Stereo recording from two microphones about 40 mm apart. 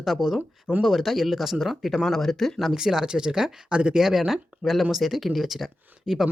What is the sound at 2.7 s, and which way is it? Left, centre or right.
Speech, centre.